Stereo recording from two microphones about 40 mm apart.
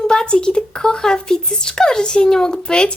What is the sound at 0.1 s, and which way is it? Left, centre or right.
Speech, left.